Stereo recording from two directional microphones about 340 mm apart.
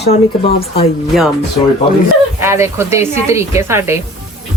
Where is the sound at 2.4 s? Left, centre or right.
Centre.